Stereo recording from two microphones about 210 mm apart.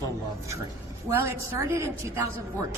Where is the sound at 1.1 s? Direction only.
10° right (ahead or behind).